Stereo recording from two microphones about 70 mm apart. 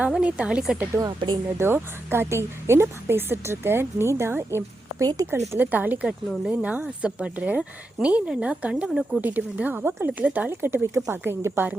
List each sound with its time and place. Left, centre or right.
0.1 s speech: centre
0.9 s speech: right
1.5 s a woman's voice: right
4.9 s speech: right
5.2 s a woman's voice: right
5.7 s speech: right
8.7 s speech: centre
9.2 s speech: right
10.5 s a woman's voice: right